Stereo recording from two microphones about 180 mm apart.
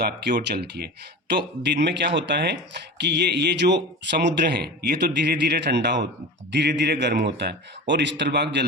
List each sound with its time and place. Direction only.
0.3 s speech: 65° right (ahead or behind)